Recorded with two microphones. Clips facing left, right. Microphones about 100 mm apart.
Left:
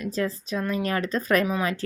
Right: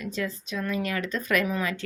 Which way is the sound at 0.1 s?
35° left (ahead or behind).